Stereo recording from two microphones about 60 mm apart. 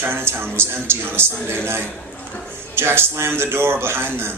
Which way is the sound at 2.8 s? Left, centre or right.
Right.